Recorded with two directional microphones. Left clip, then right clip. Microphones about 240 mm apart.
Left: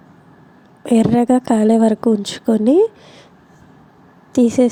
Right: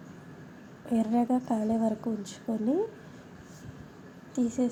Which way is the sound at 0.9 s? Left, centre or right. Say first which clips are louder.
Left 14 dB; left.